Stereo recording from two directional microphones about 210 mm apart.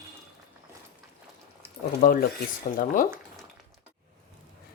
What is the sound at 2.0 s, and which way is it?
Speech, 40° left (ahead or behind).